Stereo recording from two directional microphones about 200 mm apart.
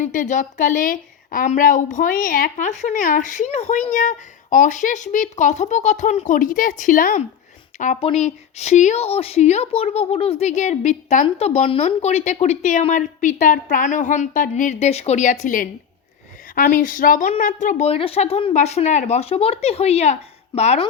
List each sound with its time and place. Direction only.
0.0 s a woman's voice: 40° left (ahead or behind)